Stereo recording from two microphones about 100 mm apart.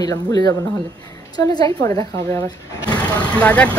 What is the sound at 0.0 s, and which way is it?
Speech, 40° left (ahead or behind).